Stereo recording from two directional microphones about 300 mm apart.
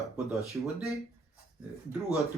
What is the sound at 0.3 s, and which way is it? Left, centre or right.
Speech, centre.